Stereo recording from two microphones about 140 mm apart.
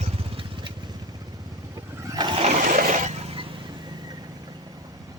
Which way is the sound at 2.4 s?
60° right (ahead or behind).